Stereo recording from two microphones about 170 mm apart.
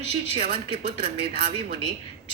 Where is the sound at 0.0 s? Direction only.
35° right (ahead or behind).